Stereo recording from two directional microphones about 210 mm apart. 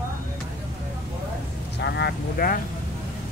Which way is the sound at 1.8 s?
50° left (ahead or behind).